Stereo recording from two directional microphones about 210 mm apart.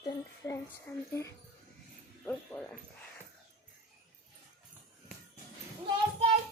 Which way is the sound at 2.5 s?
10° left (ahead or behind).